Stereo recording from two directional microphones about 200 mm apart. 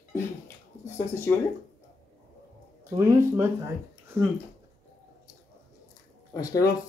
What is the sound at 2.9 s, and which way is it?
Speech, 15° right (ahead or behind).